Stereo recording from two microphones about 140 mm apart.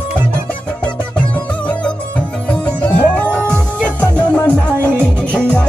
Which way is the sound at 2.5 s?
10° left (ahead or behind).